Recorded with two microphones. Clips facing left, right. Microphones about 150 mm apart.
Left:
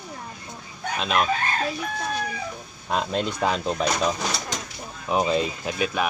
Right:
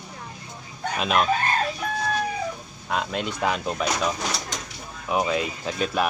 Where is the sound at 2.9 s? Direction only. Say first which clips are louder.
Left 2 dB; 5° right (ahead or behind).